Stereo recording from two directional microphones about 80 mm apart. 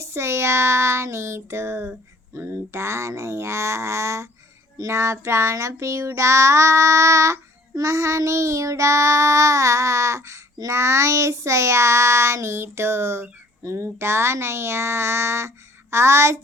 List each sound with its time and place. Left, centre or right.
0.0 s child singing: right